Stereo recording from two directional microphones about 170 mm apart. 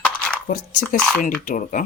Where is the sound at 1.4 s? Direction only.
50° left (ahead or behind).